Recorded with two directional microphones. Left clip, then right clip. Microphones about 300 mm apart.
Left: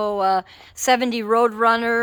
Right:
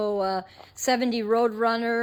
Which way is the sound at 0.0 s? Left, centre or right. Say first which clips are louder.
Left 6 dB; centre.